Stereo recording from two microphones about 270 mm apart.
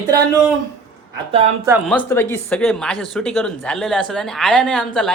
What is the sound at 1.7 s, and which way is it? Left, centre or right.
Speech, centre.